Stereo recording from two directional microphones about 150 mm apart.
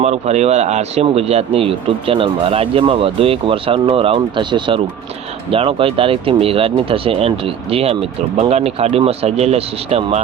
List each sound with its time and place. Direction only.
0.0 s speech: 45° right (ahead or behind)